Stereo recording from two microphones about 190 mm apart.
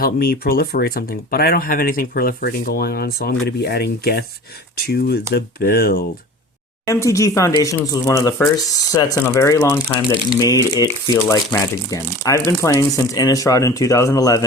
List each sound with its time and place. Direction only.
0.0 s speech: 50° left (ahead or behind)
6.8 s speech: 15° left (ahead or behind)